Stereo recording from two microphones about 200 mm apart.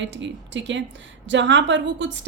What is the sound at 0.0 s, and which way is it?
A woman's voice, 65° right (ahead or behind).